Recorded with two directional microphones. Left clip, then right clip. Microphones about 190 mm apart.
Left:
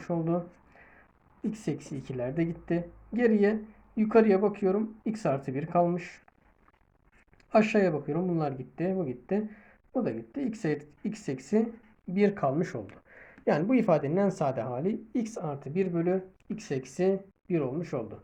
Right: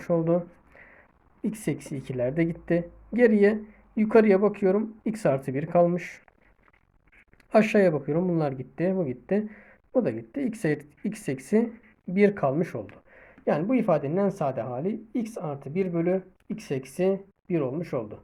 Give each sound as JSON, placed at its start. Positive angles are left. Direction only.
{"t": 0.0, "sound": "a sound", "side_deg": -40}
{"t": 1.4, "sound": "a woman's voice", "side_deg": -40}
{"t": 7.5, "sound": "a woman's voice", "side_deg": -40}
{"t": 13.1, "sound": "speech", "side_deg": -10}